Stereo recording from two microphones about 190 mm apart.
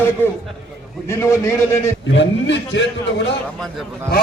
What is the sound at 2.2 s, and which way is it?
A man's voice, 70° left (ahead or behind).